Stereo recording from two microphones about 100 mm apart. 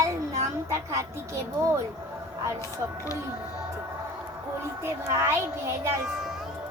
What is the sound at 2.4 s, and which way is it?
Speech, 35° right (ahead or behind).